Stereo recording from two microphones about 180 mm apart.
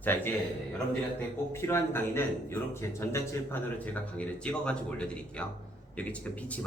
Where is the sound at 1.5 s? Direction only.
15° left (ahead or behind).